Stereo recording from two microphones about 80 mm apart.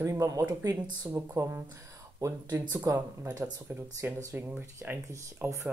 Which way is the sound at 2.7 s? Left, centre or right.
Right.